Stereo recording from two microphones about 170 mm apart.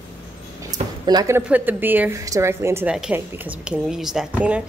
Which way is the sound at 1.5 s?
10° right (ahead or behind).